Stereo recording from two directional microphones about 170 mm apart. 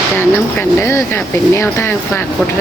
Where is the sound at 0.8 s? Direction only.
15° left (ahead or behind).